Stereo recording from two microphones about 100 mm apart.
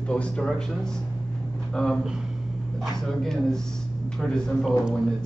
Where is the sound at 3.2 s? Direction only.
5° left (ahead or behind).